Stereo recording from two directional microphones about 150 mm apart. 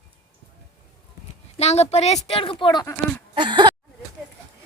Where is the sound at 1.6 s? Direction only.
45° left (ahead or behind); by 2.9 s 30° left (ahead or behind).